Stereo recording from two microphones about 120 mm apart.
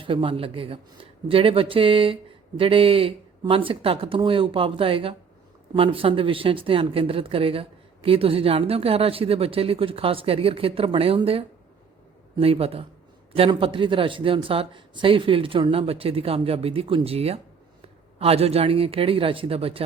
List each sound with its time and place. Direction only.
0.0 s speech: 45° right (ahead or behind)
12.4 s speech: 55° right (ahead or behind)
13.5 s speech: 45° right (ahead or behind)